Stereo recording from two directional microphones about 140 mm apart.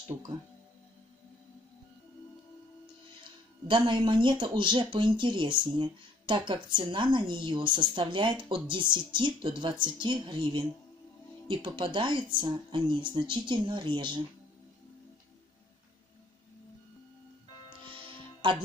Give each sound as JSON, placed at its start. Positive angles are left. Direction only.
{"t": 3.6, "sound": "speech", "side_deg": -35}
{"t": 18.0, "sound": "music", "side_deg": -40}